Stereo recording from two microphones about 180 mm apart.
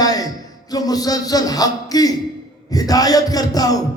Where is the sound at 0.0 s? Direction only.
20° left (ahead or behind).